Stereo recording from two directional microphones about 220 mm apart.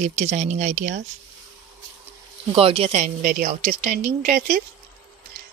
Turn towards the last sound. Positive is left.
turn(degrees=-35)  # may be behind; listen again after turning